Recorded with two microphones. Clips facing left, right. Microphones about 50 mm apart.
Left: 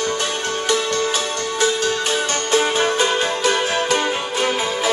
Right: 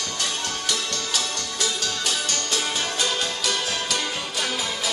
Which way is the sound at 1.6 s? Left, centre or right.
Left.